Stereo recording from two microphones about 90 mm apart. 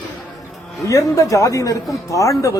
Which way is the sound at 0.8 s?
35° left (ahead or behind).